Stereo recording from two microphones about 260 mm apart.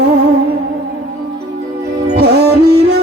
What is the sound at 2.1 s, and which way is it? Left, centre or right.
Music, right.